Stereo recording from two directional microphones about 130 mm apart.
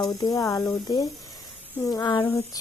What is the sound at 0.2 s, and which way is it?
Speech, 25° left (ahead or behind).